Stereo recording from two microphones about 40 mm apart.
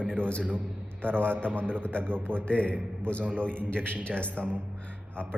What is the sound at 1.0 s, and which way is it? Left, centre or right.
Speech, right.